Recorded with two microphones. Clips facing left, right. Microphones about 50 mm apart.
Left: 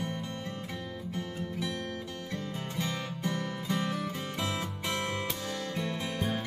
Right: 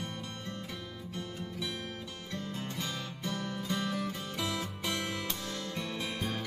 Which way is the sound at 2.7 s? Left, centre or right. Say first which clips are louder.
Left 4 dB; left.